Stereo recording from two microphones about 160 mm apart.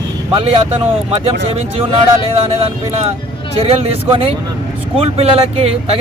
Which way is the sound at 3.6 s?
35° right (ahead or behind).